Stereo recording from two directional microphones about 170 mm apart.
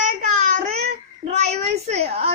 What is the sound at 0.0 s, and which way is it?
Child singing, 45° right (ahead or behind).